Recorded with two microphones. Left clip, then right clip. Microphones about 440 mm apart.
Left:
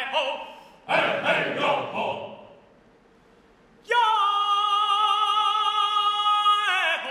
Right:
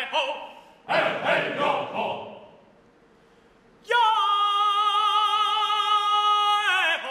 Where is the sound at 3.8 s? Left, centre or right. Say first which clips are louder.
Even; right.